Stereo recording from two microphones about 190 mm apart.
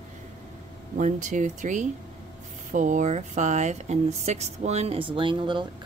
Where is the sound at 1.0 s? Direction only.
40° right (ahead or behind).